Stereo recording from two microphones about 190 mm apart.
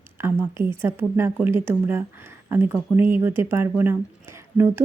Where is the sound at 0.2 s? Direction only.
10° right (ahead or behind).